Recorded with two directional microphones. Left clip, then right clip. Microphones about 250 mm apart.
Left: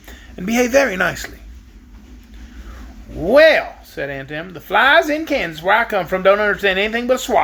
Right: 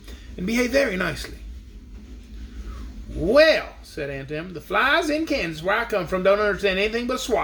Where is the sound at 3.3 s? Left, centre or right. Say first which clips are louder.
Left 6 dB; centre.